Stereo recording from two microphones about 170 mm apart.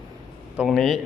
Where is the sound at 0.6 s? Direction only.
Centre (ahead or behind).